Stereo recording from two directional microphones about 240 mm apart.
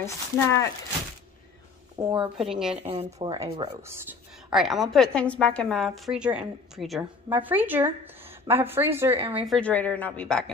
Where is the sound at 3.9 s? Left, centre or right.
Centre.